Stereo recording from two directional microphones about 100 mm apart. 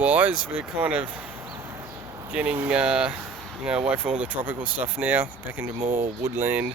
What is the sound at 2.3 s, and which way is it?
Speech, 10° right (ahead or behind).